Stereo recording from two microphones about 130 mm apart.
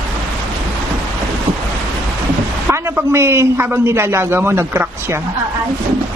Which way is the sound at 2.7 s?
20° right (ahead or behind).